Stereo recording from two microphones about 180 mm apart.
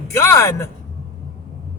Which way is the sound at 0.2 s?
15° left (ahead or behind).